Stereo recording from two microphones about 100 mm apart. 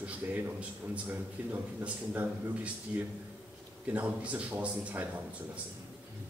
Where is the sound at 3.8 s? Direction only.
15° right (ahead or behind).